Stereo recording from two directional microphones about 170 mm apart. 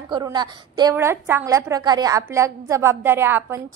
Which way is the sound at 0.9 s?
15° right (ahead or behind).